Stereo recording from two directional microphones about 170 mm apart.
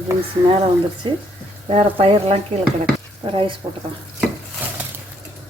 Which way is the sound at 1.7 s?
35° right (ahead or behind).